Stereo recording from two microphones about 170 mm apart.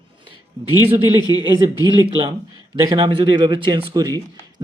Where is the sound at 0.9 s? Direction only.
30° right (ahead or behind).